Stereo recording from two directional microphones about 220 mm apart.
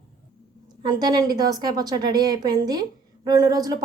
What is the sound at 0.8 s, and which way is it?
A woman's voice, 20° right (ahead or behind).